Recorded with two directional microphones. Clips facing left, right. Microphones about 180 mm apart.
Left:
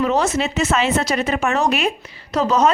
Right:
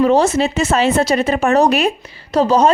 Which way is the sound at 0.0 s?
30° right (ahead or behind).